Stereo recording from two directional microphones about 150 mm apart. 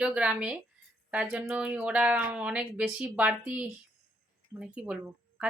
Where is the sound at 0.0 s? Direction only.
10° right (ahead or behind).